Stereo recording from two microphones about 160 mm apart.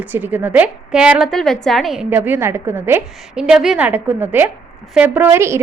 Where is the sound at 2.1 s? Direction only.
10° right (ahead or behind).